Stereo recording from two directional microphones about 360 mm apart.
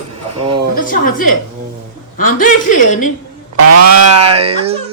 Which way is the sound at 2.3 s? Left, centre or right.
Left.